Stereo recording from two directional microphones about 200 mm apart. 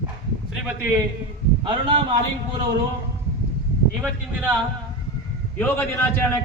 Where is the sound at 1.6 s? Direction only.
25° right (ahead or behind).